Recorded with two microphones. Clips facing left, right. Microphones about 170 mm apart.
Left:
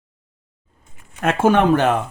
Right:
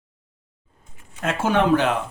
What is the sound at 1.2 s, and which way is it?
Speech, 55° left (ahead or behind).